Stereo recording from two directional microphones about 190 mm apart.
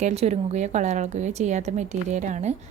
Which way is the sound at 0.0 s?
35° right (ahead or behind).